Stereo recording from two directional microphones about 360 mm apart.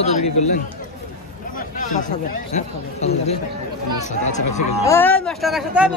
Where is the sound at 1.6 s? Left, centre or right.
Left.